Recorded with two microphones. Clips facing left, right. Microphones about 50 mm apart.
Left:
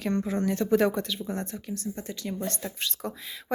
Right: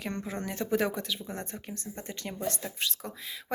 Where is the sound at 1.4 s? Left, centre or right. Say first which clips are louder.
Left 6 dB; right.